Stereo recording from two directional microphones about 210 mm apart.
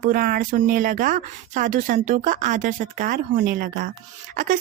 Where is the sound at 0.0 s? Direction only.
40° right (ahead or behind).